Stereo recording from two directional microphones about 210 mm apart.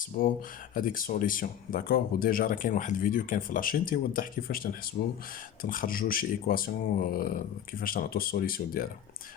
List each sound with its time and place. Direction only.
0.0 s speech: 40° left (ahead or behind)